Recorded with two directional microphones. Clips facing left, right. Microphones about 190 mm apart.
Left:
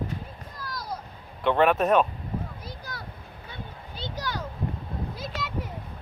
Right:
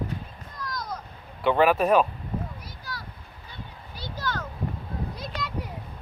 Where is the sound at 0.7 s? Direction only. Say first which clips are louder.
Right 1 dB; 30° left (ahead or behind).